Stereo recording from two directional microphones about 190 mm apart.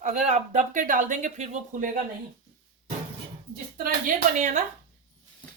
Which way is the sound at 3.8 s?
50° right (ahead or behind).